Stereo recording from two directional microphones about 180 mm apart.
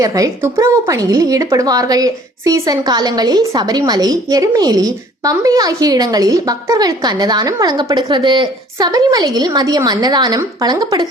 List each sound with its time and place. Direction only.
0.0 s a woman's voice: 20° right (ahead or behind)